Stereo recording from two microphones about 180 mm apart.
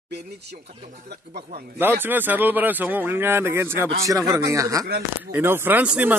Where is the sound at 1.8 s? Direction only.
10° right (ahead or behind).